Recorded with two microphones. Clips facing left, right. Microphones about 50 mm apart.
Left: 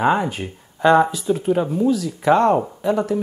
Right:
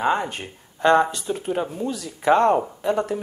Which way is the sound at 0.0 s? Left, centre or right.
Centre.